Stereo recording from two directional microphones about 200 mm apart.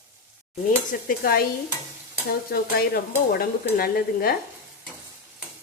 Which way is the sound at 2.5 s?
50° left (ahead or behind).